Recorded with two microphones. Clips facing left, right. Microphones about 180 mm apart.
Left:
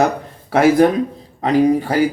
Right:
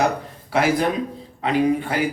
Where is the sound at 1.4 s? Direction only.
40° left (ahead or behind).